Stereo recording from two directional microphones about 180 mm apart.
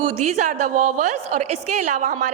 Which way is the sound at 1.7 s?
45° right (ahead or behind).